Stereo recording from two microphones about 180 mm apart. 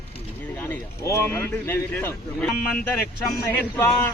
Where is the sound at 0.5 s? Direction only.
10° left (ahead or behind).